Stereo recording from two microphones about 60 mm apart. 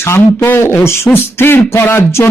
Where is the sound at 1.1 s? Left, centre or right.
Left.